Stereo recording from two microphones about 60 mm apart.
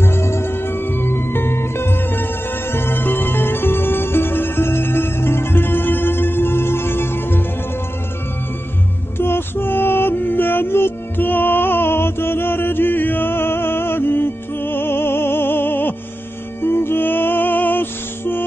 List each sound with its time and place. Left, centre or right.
0.0 s music: left
9.2 s music: left